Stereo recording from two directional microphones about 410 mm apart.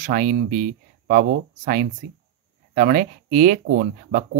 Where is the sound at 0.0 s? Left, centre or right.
Centre.